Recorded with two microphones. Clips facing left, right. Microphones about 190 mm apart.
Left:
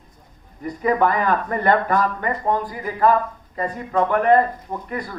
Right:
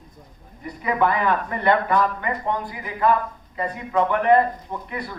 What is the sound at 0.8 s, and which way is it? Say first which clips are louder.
A man's voice: left 2 dB; 40° left (ahead or behind).